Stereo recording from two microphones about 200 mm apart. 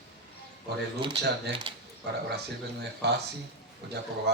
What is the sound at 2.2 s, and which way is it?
Speech, 55° right (ahead or behind).